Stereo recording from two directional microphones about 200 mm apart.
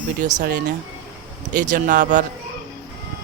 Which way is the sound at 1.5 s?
40° right (ahead or behind).